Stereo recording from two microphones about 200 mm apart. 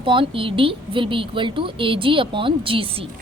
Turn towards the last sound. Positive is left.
turn(degrees=-25)  # may be behind; listen again after turning